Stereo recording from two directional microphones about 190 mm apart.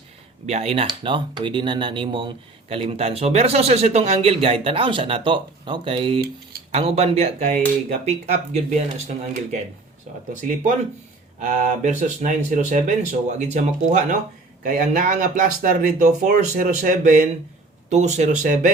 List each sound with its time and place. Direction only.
0.4 s speech: 30° right (ahead or behind)
11.3 s speech: 40° right (ahead or behind)